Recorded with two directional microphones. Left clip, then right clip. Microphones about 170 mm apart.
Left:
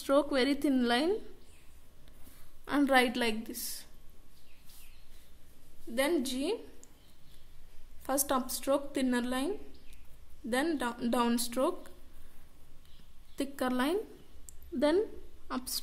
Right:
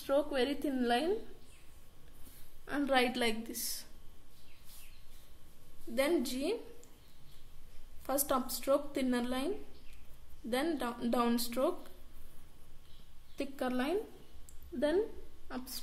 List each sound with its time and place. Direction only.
0.0 s a woman's voice: 50° left (ahead or behind)
2.6 s a woman's voice: 45° left (ahead or behind); by 3.3 s 30° left (ahead or behind)
3.4 s a woman's voice: 15° left (ahead or behind)
5.9 s a woman's voice: 20° left (ahead or behind)
8.1 s a woman's voice: 25° left (ahead or behind)
10.5 s a woman's voice: 25° left (ahead or behind)
13.4 s a woman's voice: 40° left (ahead or behind)
15.4 s a woman's voice: 50° left (ahead or behind)